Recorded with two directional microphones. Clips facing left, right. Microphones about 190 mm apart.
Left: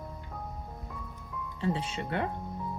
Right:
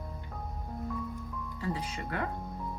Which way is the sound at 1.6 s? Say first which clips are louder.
Left 4 dB; 25° left (ahead or behind).